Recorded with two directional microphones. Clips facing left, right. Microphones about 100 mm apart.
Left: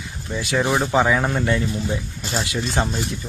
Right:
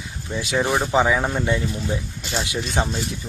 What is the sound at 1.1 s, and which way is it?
Speech, 5° right (ahead or behind).